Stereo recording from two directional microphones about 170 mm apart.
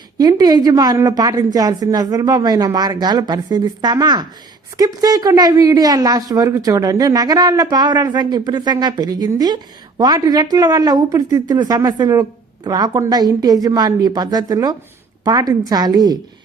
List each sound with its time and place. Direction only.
0.2 s a woman's voice: 20° right (ahead or behind)